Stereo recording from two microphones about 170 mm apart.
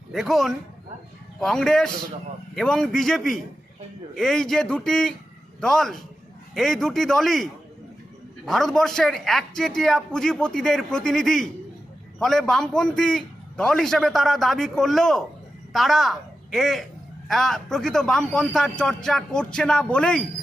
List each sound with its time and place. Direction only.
0.1 s a man's voice: centre (ahead or behind)
8.4 s a man's voice: centre (ahead or behind)